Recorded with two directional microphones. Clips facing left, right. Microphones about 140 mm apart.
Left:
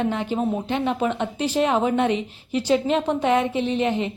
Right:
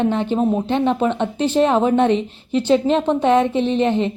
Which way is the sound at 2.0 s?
10° left (ahead or behind).